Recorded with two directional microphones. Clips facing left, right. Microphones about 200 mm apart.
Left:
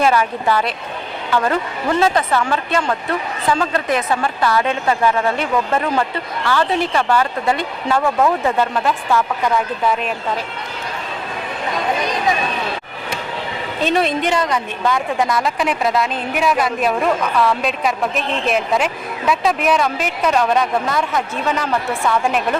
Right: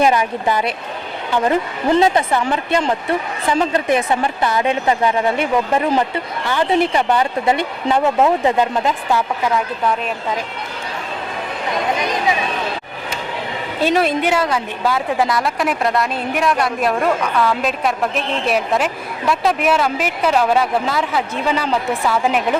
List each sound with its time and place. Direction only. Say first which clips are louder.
0.0 s a woman's voice: right 1 dB; 15° right (ahead or behind)
9.5 s a woman's voice: left 1 dB; 5° left (ahead or behind)
13.8 s a woman's voice: right 1 dB; 10° right (ahead or behind)